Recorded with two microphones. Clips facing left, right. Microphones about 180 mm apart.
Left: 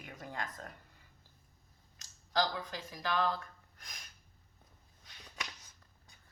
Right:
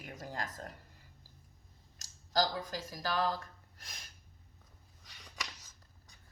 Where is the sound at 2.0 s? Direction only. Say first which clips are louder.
Right 1 dB; 40° right (ahead or behind).